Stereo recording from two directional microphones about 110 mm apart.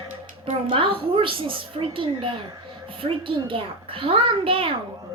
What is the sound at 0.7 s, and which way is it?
A woman's voice, 55° right (ahead or behind).